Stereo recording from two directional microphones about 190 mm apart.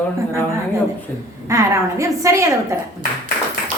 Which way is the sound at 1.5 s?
15° right (ahead or behind).